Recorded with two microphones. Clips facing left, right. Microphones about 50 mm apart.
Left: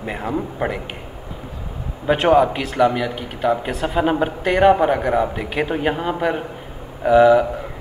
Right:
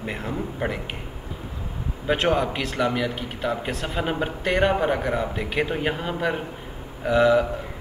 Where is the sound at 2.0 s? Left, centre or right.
Centre.